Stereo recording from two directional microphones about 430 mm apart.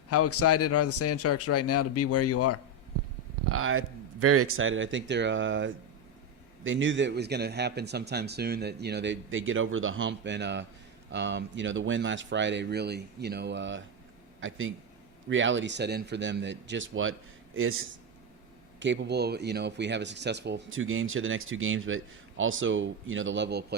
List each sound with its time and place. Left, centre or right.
0.1 s speech: left
3.5 s speech: right
15.3 s speech: right